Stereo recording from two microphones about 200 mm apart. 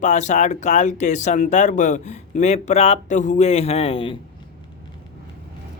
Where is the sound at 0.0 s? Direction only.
35° left (ahead or behind).